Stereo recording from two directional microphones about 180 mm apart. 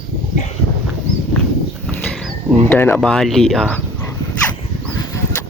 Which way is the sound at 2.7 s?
10° left (ahead or behind).